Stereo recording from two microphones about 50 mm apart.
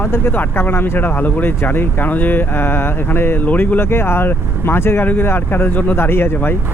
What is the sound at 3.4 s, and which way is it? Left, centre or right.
Speech, left.